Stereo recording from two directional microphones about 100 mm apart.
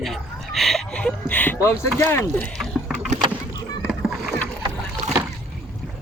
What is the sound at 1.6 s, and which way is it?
Speech, 25° left (ahead or behind).